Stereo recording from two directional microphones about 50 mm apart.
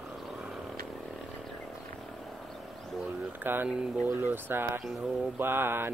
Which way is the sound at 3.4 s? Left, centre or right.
Right.